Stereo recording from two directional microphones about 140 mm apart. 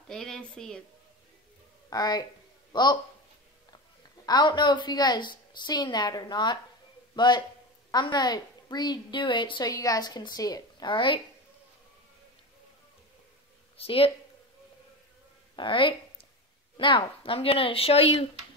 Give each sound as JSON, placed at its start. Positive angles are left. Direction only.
{"t": 0.1, "sound": "speech", "side_deg": 5}
{"t": 1.9, "sound": "speech", "side_deg": 30}
{"t": 4.3, "sound": "a woman's voice", "side_deg": 30}
{"t": 13.7, "sound": "speech", "side_deg": 45}
{"t": 15.5, "sound": "a woman's voice", "side_deg": 35}